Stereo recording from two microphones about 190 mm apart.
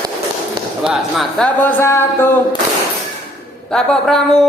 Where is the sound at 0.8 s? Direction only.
Centre (ahead or behind).